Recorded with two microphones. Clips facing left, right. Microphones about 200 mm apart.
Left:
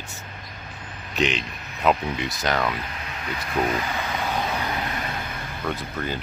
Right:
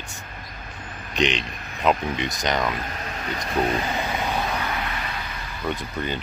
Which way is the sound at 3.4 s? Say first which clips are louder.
Right 1 dB; 35° right (ahead or behind).